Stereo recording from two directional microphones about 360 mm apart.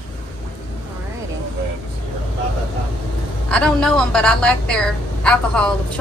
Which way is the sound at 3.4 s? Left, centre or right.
Centre.